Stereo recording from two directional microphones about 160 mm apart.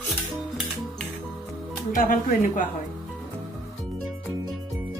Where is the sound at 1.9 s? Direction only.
60° left (ahead or behind).